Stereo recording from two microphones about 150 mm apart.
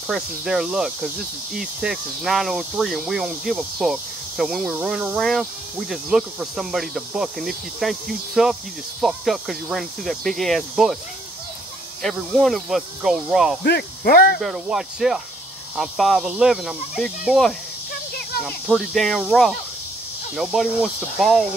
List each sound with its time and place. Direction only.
0.1 s speech: 5° right (ahead or behind)
12.0 s speech: centre (ahead or behind)
13.7 s speech: 85° left
14.4 s speech: centre (ahead or behind)